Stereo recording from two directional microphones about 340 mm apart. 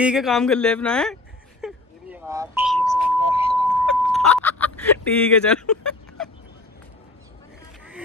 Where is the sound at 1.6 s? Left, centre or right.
Centre.